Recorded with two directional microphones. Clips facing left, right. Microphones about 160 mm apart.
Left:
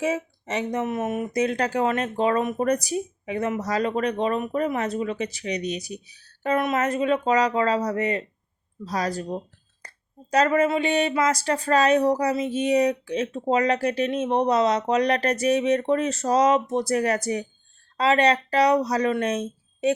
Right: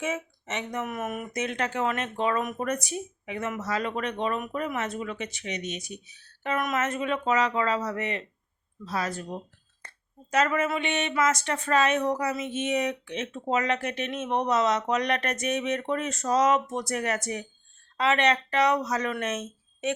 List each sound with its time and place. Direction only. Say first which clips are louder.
0.0 s speech: left 6 dB; 35° left (ahead or behind)
9.8 s a sound: left 2 dB; 35° left (ahead or behind)
10.3 s speech: left 5 dB; 35° left (ahead or behind)